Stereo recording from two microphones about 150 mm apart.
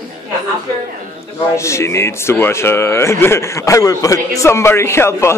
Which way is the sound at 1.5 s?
20° left (ahead or behind).